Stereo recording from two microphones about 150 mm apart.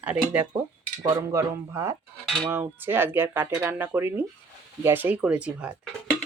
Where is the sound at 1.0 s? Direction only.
20° right (ahead or behind).